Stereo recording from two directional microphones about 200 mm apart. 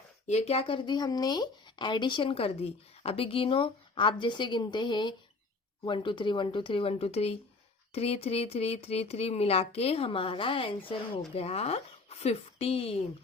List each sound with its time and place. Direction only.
0.3 s speech: 30° left (ahead or behind)